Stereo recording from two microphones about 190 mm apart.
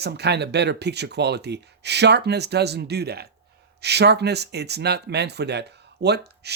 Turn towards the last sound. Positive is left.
turn(degrees=-60)  # may be behind; listen again after turning